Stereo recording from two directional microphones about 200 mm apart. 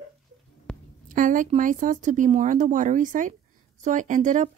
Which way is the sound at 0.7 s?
5° left (ahead or behind).